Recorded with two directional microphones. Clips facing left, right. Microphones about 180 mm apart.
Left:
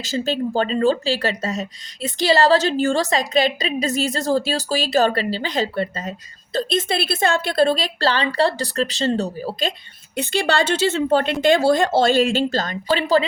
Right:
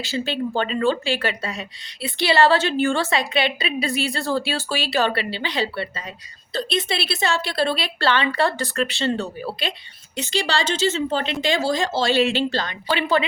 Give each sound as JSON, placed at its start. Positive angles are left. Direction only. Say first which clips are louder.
{"t": 0.0, "sound": "a woman's voice", "louder": "left 3 dB", "side_deg": 40}
{"t": 10.2, "sound": "speech", "louder": "left 4 dB", "side_deg": 55}